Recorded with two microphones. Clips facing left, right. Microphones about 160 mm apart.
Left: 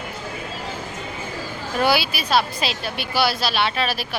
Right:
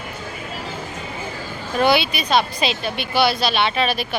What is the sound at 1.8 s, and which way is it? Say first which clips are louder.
Speech: right 3 dB; 5° left (ahead or behind).